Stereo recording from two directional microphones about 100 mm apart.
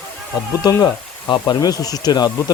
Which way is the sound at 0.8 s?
45° left (ahead or behind).